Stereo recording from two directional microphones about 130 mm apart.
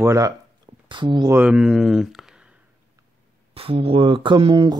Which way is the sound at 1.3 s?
10° right (ahead or behind).